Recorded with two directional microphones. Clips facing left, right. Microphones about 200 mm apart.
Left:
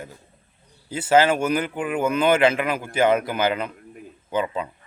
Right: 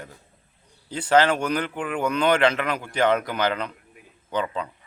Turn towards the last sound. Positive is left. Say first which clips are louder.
# left 2 dB
turn(degrees=10)  # may be behind; listen again after turning